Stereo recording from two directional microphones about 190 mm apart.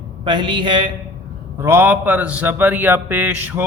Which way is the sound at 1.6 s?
10° right (ahead or behind).